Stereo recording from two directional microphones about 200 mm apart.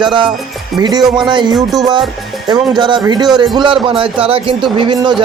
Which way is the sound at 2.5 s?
20° right (ahead or behind).